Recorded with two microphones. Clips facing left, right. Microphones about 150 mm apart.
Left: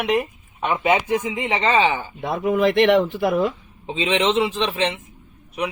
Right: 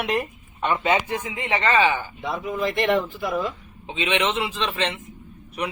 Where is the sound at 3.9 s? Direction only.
30° left (ahead or behind); by 5.0 s 15° left (ahead or behind).